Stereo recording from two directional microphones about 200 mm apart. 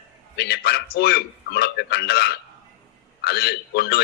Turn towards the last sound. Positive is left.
turn(degrees=55)  # may be behind; listen again after turning